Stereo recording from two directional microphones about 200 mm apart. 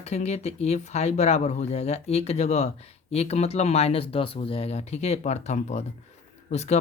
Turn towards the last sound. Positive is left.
turn(degrees=35)  # may be behind; listen again after turning